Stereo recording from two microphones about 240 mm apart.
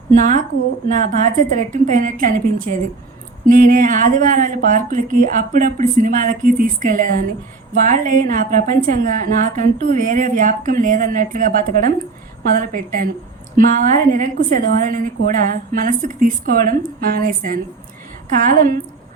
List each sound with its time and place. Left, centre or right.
0.2 s a woman's voice: right